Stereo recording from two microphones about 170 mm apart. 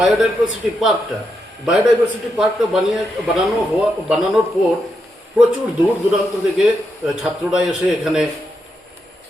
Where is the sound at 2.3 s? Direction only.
Centre (ahead or behind).